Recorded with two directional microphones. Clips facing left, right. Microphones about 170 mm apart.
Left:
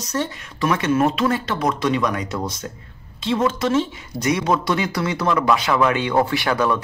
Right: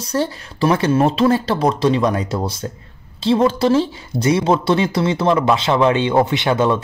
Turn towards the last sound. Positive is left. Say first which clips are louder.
# right 3 dB
turn(degrees=-25)  # may be behind; listen again after turning